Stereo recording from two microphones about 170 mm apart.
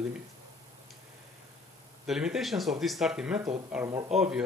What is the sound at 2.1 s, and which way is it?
Speech, 5° right (ahead or behind).